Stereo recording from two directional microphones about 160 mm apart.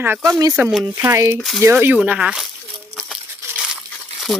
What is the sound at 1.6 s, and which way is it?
Speech, 10° right (ahead or behind).